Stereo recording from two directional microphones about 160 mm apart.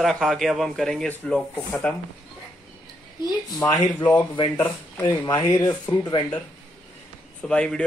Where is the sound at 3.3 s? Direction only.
20° left (ahead or behind).